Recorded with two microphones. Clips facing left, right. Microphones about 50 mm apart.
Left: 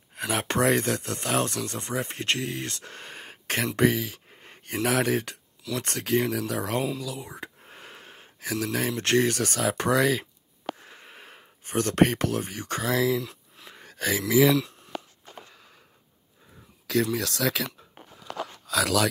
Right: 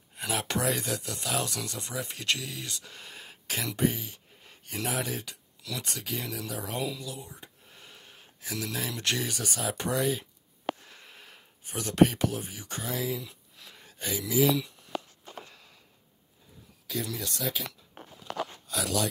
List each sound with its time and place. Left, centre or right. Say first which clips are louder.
0.3 s speech: left 6 dB; left
3.8 s speech: left 6 dB; left
4.4 s a sound: left 6 dB; left
4.8 s speech: left 9 dB; left
7.0 s speech: left 6 dB; left
7.6 s a sound: left 6 dB; left
8.7 s speech: left 9 dB; left
10.9 s a sound: left 4 dB; left
11.6 s speech: left 2 dB; left
13.6 s a sound: left 3 dB; left
13.9 s speech: left 6 dB; left
16.8 s speech: left 9 dB; left